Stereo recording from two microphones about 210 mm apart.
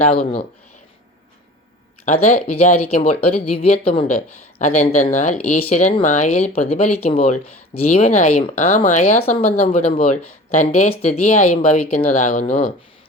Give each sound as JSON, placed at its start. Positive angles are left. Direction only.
{"t": 0.0, "sound": "speech", "side_deg": 30}
{"t": 2.1, "sound": "speech", "side_deg": 30}